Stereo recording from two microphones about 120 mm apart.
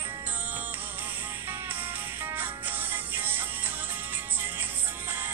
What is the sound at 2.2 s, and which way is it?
Music, 15° right (ahead or behind).